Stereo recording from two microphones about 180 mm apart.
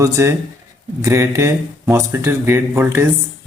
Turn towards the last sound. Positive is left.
turn(degrees=-15)  # may be behind; listen again after turning